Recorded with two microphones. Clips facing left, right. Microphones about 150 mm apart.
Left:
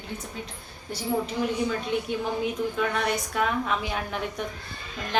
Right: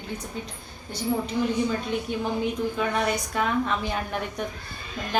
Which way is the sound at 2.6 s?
Centre (ahead or behind).